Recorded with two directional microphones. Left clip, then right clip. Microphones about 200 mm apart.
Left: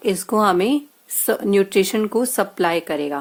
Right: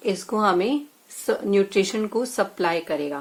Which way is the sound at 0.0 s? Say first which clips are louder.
Left 4 dB; 50° left (ahead or behind).